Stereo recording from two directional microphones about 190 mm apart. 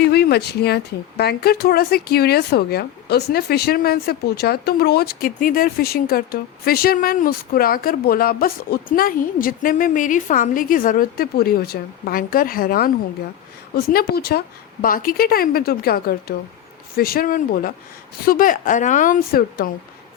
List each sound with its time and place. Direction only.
0.0 s speech: 55° left (ahead or behind)